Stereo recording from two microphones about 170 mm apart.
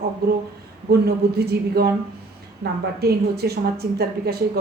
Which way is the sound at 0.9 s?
70° right (ahead or behind).